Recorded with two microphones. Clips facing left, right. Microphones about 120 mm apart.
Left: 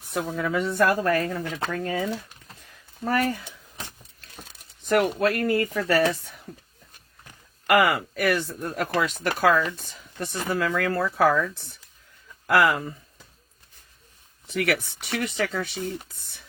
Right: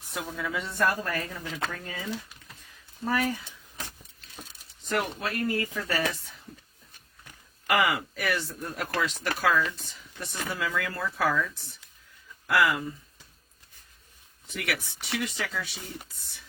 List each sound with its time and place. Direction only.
0.1 s speech: 55° left (ahead or behind)
4.9 s speech: 65° left (ahead or behind)
7.7 s speech: 55° left (ahead or behind)
12.5 s speech: 60° left (ahead or behind)
14.4 s speech: 55° left (ahead or behind)